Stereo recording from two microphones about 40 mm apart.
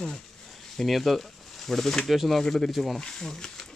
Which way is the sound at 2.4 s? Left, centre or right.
Centre.